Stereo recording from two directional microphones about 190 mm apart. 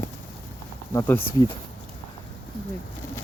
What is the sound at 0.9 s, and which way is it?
Speech, 10° left (ahead or behind).